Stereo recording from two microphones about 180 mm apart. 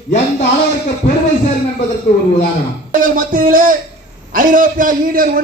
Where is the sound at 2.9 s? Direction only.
50° right (ahead or behind).